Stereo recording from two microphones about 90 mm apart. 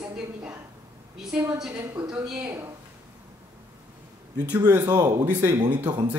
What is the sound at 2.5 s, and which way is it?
Speech, 30° right (ahead or behind).